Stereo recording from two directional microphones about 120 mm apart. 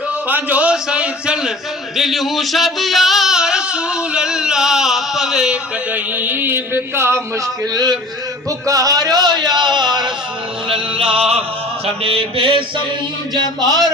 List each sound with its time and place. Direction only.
0.3 s a man's voice: 15° right (ahead or behind)
2.0 s singing: centre (ahead or behind); by 7.2 s 20° right (ahead or behind)
7.7 s a sound: 30° right (ahead or behind)
8.4 s speech: 30° right (ahead or behind)
10.7 s music: 50° right (ahead or behind)
12.0 s mantra: 50° right (ahead or behind)